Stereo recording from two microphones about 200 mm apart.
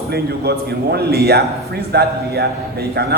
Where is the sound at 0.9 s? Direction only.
50° right (ahead or behind).